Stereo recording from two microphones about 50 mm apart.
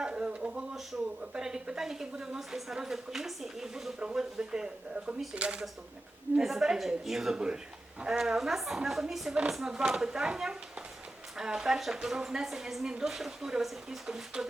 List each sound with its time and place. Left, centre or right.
0.0 s a sound: right
1.3 s a woman's voice: centre
4.0 s a woman's voice: centre
6.4 s a woman's voice: centre
7.3 s a woman's voice: centre
8.4 s a woman's voice: centre